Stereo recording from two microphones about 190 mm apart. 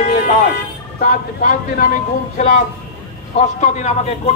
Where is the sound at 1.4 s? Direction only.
45° left (ahead or behind).